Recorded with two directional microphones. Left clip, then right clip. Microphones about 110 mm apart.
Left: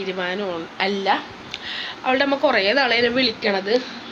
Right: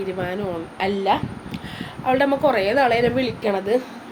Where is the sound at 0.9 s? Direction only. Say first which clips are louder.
Right 1 dB; 20° right (ahead or behind).